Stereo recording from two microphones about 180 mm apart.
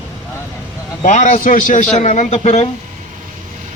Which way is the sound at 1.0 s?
40° left (ahead or behind).